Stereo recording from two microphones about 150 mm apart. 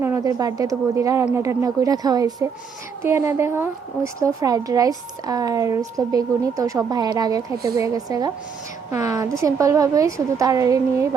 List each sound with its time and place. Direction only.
0.0 s speech: 20° right (ahead or behind)